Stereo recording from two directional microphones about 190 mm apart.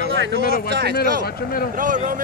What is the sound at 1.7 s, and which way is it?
Speech, 45° right (ahead or behind).